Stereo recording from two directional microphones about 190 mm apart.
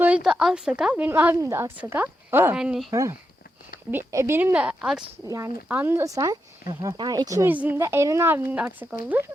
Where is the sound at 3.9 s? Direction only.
10° right (ahead or behind).